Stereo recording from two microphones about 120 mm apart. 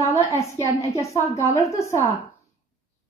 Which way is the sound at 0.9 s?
25° left (ahead or behind).